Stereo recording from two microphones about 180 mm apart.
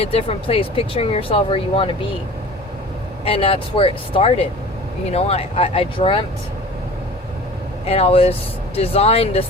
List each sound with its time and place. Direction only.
0.0 s speech: 35° left (ahead or behind)
3.2 s speech: 30° left (ahead or behind)
7.9 s speech: 35° left (ahead or behind)